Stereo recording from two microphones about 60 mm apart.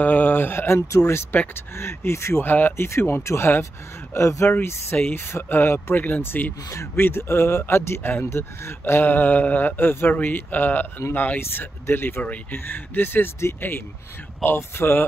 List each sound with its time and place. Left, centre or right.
0.0 s speech: left
2.4 s speech: left
2.9 s speech: left
7.0 s speech: left